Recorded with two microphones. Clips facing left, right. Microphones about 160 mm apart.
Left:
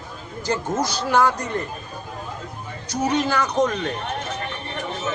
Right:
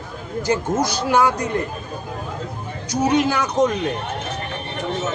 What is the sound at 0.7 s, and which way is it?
Speech, 15° right (ahead or behind).